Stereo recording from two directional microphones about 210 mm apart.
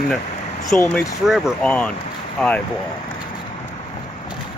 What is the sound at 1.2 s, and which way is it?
Speech, centre (ahead or behind).